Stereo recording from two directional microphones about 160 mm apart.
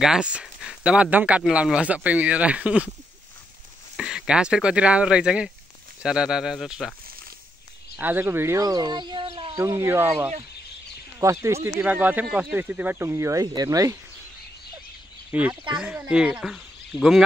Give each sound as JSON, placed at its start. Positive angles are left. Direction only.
{"t": 0.0, "sound": "speech", "side_deg": -5}
{"t": 3.9, "sound": "speech", "side_deg": -5}
{"t": 7.9, "sound": "speech", "side_deg": -15}
{"t": 9.6, "sound": "speech", "side_deg": -20}
{"t": 15.3, "sound": "speech", "side_deg": -10}